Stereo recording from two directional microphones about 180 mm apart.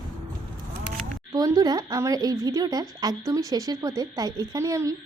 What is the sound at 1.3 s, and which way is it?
Speech, 20° right (ahead or behind).